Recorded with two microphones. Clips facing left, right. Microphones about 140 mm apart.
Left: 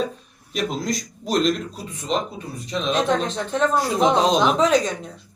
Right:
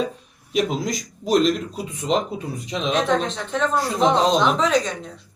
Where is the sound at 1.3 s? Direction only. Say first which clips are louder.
Right 2 dB; 5° right (ahead or behind).